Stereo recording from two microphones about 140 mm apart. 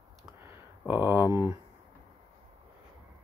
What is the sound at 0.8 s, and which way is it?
Speech, 15° right (ahead or behind).